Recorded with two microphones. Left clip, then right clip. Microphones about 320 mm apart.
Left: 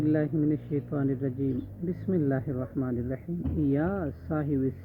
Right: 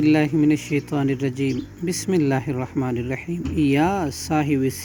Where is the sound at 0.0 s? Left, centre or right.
Centre.